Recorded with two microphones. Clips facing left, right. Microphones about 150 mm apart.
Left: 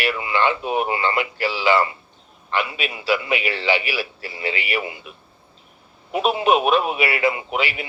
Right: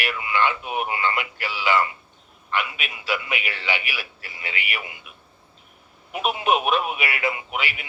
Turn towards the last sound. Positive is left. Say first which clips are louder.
# left 5 dB
turn(degrees=35)  # may be behind; listen again after turning